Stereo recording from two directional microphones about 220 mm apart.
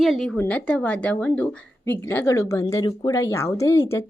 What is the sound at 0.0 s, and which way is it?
A woman's voice, centre (ahead or behind).